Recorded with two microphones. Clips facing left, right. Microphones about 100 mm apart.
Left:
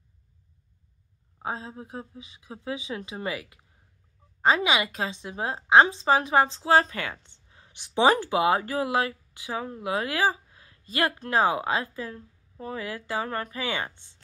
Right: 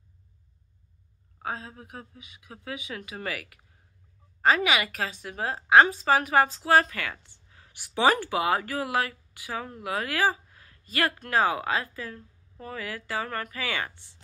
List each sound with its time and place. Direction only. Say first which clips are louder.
1.4 s a woman's voice: left 2 dB; 25° left (ahead or behind)